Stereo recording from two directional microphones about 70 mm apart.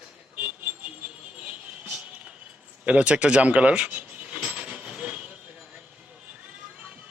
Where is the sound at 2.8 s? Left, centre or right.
Centre.